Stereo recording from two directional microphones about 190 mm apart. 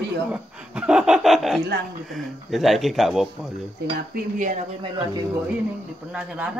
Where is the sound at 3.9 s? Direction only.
45° right (ahead or behind).